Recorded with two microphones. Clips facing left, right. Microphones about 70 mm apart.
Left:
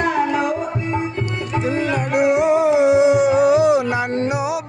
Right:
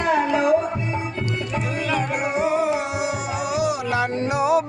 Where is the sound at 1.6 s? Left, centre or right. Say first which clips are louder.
Left 5 dB; left.